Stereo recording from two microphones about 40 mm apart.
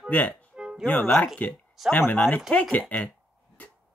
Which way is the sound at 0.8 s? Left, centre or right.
Left.